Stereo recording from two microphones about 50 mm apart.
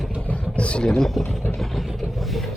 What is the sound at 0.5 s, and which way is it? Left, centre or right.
Speech, left.